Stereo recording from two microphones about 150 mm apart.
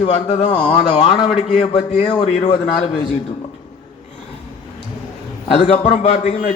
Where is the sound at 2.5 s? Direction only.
30° left (ahead or behind).